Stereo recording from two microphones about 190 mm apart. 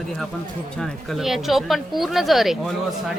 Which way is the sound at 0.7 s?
Centre (ahead or behind).